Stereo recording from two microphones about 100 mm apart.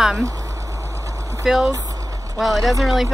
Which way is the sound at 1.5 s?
5° right (ahead or behind).